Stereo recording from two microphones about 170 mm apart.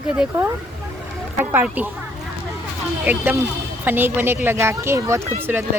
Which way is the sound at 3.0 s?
15° right (ahead or behind).